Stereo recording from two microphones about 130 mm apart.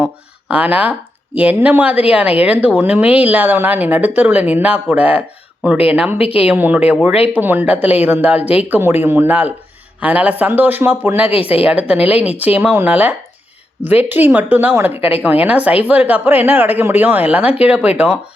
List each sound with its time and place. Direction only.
0.0 s speech: 10° right (ahead or behind)
6.1 s speech: 50° left (ahead or behind)
6.4 s speech: 10° right (ahead or behind)
11.3 s speech: 50° left (ahead or behind)
11.6 s speech: 10° right (ahead or behind)